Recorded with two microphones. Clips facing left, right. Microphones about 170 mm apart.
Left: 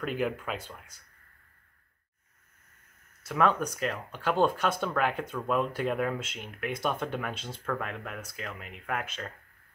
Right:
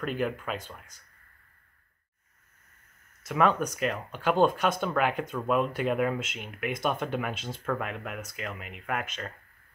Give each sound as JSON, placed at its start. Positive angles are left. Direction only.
{"t": 0.0, "sound": "speech", "side_deg": 0}
{"t": 3.3, "sound": "speech", "side_deg": -5}